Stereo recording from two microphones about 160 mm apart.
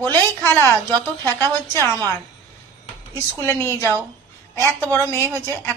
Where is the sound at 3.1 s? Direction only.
20° left (ahead or behind).